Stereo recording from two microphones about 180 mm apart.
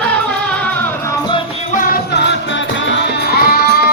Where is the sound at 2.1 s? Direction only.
80° left; by 3.7 s 60° left (ahead or behind).